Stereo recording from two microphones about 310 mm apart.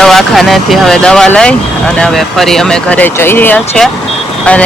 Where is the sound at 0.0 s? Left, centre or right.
Centre.